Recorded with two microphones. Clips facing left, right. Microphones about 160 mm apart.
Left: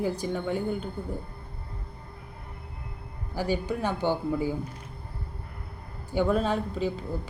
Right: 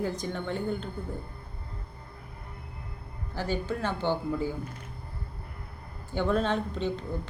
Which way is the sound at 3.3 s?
15° left (ahead or behind).